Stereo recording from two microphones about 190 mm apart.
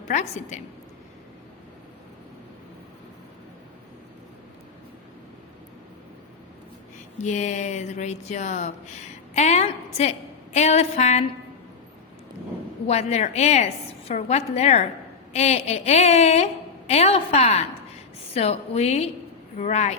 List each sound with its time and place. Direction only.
0.1 s speech: 40° left (ahead or behind)
7.2 s speech: 40° left (ahead or behind)
12.9 s speech: 35° left (ahead or behind)